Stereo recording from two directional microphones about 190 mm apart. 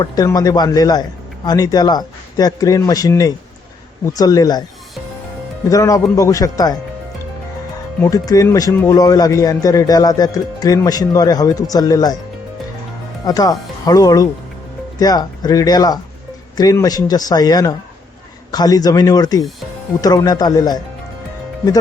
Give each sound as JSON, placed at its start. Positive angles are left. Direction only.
{"t": 0.0, "sound": "speech", "side_deg": 20}
{"t": 5.6, "sound": "speech", "side_deg": 15}
{"t": 8.0, "sound": "speech", "side_deg": 20}
{"t": 13.2, "sound": "speech", "side_deg": 20}